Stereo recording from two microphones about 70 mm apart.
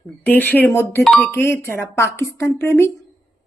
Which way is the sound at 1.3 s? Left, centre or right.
Left.